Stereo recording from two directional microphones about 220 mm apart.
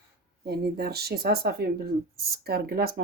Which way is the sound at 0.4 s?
45° right (ahead or behind).